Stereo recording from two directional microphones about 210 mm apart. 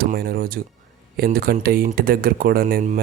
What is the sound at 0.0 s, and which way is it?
Speech, 45° right (ahead or behind).